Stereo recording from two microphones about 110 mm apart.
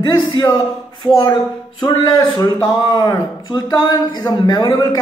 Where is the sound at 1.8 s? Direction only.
40° left (ahead or behind).